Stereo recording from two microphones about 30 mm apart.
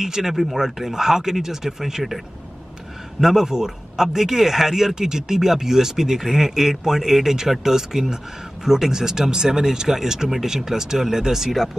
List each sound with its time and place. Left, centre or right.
0.0 s a man's voice: centre
3.2 s a man's voice: centre